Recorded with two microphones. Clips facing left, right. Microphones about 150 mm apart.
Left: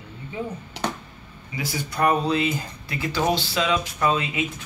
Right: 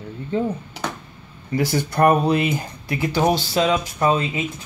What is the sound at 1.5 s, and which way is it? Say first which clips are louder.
Speech: right 9 dB; 60° right (ahead or behind).